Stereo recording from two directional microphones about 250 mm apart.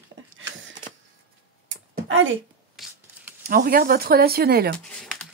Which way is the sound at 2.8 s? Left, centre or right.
Centre.